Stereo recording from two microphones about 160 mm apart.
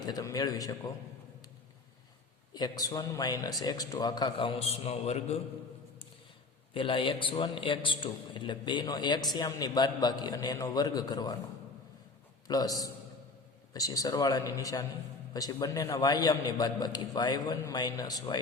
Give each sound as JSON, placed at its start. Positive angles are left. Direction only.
{"t": 0.0, "sound": "a man's voice", "side_deg": 25}
{"t": 2.5, "sound": "a man's voice", "side_deg": 25}
{"t": 6.7, "sound": "a man's voice", "side_deg": 30}
{"t": 12.5, "sound": "a man's voice", "side_deg": 25}